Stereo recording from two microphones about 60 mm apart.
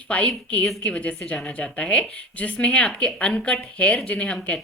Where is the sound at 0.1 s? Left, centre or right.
Left.